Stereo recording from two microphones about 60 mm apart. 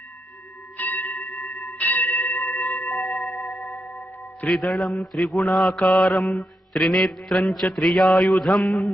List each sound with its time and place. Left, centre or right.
0.8 s bell: left
2.5 s music: left
4.5 s a man's voice: centre